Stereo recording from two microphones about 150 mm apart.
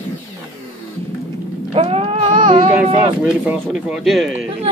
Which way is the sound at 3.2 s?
10° right (ahead or behind).